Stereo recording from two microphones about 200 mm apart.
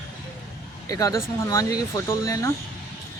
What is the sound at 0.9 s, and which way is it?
Speech, 15° left (ahead or behind).